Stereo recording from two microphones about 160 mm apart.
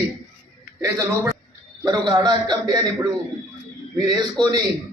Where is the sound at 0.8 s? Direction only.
20° right (ahead or behind).